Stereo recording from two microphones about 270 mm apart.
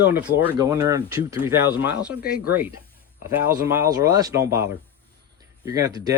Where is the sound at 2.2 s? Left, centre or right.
Left.